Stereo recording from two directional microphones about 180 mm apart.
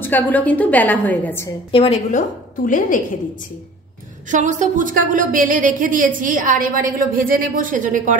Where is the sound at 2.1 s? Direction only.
50° left (ahead or behind).